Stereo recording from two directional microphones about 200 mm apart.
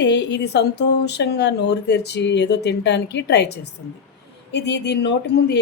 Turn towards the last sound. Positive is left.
turn(degrees=55)  # may be behind; listen again after turning